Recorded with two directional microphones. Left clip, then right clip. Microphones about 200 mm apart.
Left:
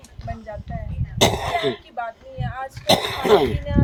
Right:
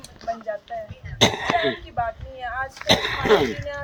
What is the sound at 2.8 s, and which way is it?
Speech, 60° left (ahead or behind).